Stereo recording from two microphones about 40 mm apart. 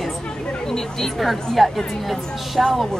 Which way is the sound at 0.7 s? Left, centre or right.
Centre.